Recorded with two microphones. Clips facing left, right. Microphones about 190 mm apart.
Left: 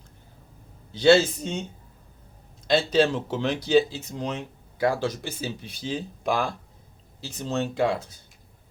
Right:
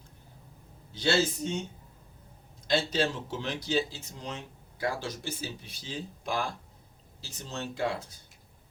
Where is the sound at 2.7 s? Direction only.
70° left (ahead or behind).